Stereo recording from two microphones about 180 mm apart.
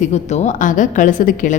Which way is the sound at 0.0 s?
40° left (ahead or behind).